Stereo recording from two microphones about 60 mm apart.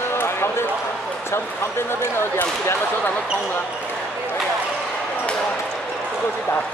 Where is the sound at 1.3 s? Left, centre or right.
Left.